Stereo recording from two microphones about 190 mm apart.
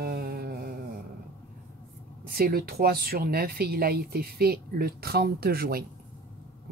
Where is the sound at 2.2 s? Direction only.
50° right (ahead or behind).